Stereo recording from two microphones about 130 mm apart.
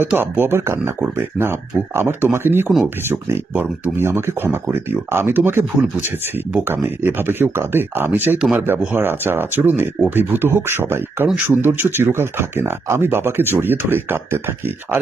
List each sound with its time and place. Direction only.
0.0 s speech: 15° right (ahead or behind)